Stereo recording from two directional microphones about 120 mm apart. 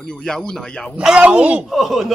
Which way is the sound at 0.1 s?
5° left (ahead or behind).